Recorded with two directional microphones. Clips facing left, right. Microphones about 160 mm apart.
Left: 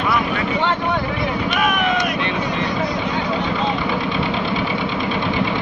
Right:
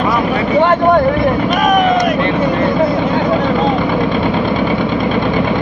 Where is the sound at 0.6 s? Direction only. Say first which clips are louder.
Right 10 dB; 50° right (ahead or behind).